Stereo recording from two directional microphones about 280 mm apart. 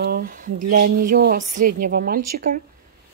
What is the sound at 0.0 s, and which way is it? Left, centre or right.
A woman's voice, right.